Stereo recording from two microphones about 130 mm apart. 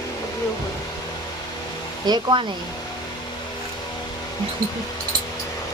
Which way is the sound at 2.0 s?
35° right (ahead or behind).